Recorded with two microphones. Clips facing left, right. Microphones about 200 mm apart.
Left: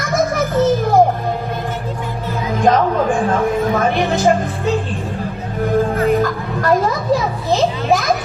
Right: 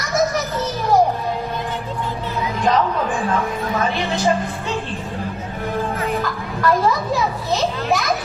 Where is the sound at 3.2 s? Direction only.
45° left (ahead or behind).